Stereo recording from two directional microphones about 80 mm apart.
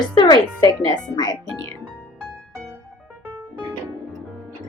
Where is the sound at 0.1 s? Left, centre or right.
Left.